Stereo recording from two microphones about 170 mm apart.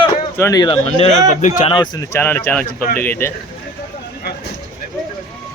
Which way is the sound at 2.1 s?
10° left (ahead or behind).